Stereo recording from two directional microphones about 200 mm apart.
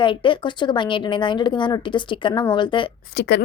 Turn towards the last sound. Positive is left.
turn(degrees=55)  # may be behind; listen again after turning